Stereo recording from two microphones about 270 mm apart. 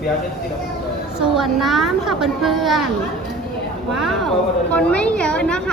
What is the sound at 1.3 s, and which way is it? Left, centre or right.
A child's voice, centre.